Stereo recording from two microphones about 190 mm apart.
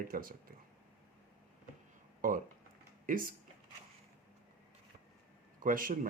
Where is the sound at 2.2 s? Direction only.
45° right (ahead or behind).